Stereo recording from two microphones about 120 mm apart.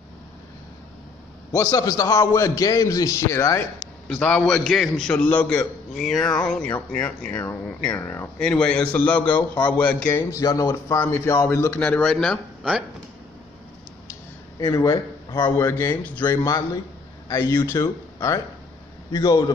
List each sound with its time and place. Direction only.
1.5 s a man's voice: 30° left (ahead or behind)
4.1 s a man's voice: 10° left (ahead or behind)
8.4 s a man's voice: 10° left (ahead or behind)
14.6 s a man's voice: 35° left (ahead or behind)
15.5 s a man's voice: 20° left (ahead or behind)
16.4 s a man's voice: 30° left (ahead or behind)